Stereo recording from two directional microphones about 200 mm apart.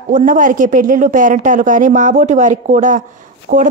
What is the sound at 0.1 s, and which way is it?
A woman's voice, 40° right (ahead or behind).